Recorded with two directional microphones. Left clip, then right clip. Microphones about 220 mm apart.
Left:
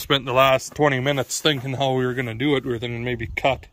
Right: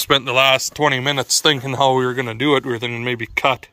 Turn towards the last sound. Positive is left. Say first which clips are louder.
# right 4 dB
turn(degrees=5)  # may be behind; listen again after turning